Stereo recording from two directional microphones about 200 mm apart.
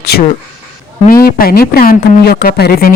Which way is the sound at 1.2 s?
50° left (ahead or behind).